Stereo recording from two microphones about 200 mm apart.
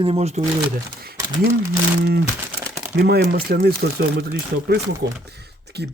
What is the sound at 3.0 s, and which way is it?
Speech, 55° right (ahead or behind).